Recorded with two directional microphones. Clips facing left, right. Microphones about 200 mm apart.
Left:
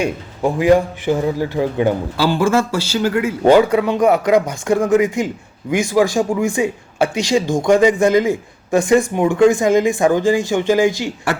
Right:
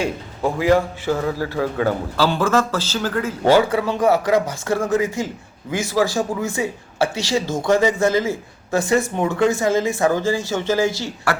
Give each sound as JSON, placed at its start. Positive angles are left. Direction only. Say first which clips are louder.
{"t": 0.0, "sound": "a man's voice", "louder": "left 3 dB", "side_deg": 15}